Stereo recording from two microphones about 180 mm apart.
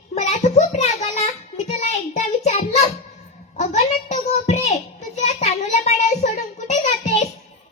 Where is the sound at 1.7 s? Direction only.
40° left (ahead or behind).